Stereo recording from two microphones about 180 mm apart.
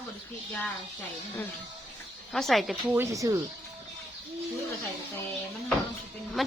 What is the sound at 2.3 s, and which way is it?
Speech, centre (ahead or behind).